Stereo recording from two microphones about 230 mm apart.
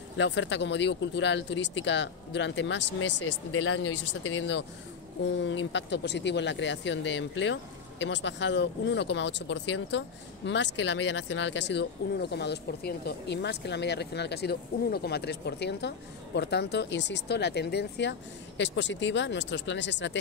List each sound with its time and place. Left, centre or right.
0.2 s speech: left
3.2 s speech: left